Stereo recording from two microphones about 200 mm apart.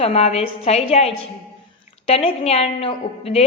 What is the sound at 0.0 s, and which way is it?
A woman's voice, 30° left (ahead or behind).